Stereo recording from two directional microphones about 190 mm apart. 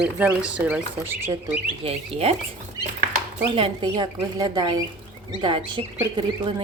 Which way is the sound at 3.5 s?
25° right (ahead or behind).